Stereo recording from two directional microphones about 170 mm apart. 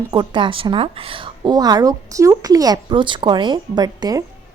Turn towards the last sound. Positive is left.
turn(degrees=-25)  # may be behind; listen again after turning